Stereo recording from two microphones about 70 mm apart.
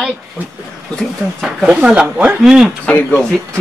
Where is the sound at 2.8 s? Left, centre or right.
Left.